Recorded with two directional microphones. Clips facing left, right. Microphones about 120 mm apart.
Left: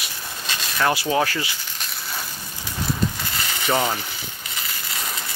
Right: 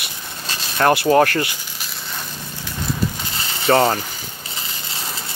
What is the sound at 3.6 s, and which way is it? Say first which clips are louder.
Speech: right 7 dB; 65° right (ahead or behind).